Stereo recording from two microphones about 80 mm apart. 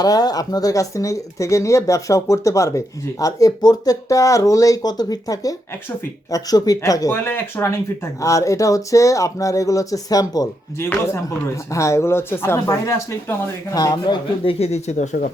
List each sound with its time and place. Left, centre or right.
0.0 s speech: left
4.1 s speech: left
7.1 s speech: left
10.8 s speech: left
12.6 s speech: left
13.7 s a man's voice: left